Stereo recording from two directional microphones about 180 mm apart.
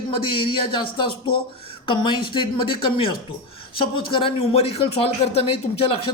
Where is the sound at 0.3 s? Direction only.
30° left (ahead or behind).